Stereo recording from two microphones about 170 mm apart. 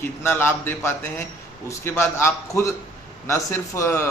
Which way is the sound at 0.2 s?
15° left (ahead or behind).